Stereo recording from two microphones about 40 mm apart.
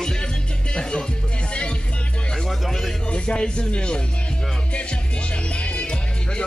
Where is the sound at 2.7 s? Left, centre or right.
Centre.